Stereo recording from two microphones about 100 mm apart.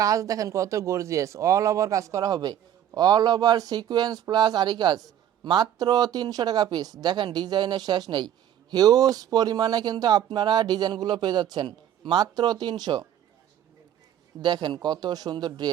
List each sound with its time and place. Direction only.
0.0 s speech: 35° right (ahead or behind)
14.4 s speech: 45° right (ahead or behind)